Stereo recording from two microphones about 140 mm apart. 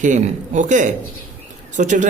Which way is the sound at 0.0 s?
60° right (ahead or behind).